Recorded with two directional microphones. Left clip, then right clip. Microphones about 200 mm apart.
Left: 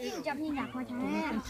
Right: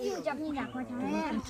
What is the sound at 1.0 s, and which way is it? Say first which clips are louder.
Speech: right 1 dB; centre (ahead or behind).